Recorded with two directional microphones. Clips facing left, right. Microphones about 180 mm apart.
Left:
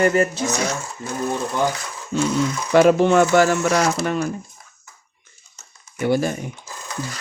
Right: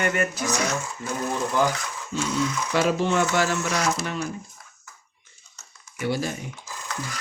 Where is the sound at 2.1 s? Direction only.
60° left (ahead or behind).